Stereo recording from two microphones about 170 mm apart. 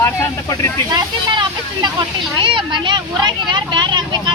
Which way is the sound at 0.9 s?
25° right (ahead or behind).